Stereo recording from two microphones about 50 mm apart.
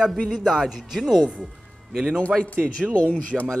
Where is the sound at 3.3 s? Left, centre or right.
Centre.